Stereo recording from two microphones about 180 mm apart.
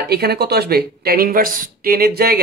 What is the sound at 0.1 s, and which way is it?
Speech, 60° right (ahead or behind).